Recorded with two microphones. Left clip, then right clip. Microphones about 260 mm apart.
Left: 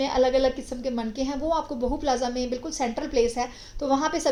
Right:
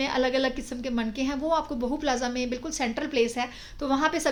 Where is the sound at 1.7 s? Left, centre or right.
Right.